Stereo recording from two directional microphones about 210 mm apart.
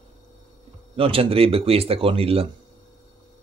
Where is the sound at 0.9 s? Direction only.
25° right (ahead or behind).